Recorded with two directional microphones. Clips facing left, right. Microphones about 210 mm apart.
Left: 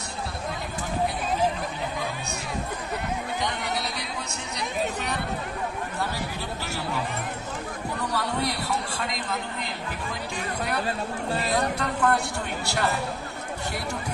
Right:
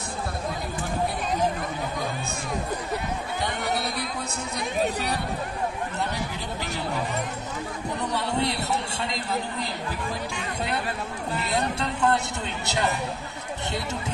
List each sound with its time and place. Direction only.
8.0 s a man's voice: 25° right (ahead or behind)
11.5 s a man's voice: 25° right (ahead or behind)